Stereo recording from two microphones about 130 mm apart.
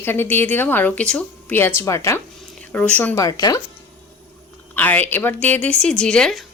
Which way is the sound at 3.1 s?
25° left (ahead or behind).